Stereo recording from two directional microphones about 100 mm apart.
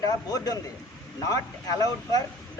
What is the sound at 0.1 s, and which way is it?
A woman's voice, 35° left (ahead or behind).